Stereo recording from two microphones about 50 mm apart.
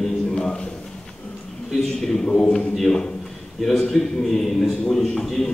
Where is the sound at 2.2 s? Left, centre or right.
Centre.